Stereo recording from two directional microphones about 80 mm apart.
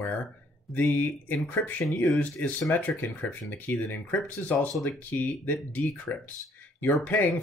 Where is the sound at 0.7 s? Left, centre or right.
Left.